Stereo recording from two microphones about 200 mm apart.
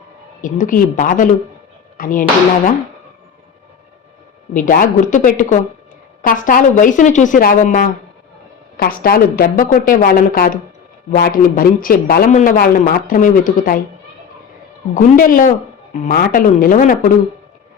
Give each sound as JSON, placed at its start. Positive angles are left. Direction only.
{"t": 0.4, "sound": "speech", "side_deg": 40}
{"t": 4.5, "sound": "a man's voice", "side_deg": 40}
{"t": 14.9, "sound": "a man's voice", "side_deg": 45}